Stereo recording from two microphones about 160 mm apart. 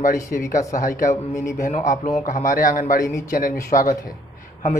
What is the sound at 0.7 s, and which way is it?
A man's voice, 55° left (ahead or behind).